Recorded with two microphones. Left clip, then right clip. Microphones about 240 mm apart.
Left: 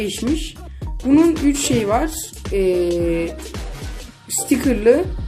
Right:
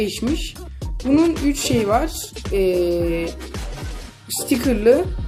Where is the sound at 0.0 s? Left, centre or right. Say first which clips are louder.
Left 1 dB; centre.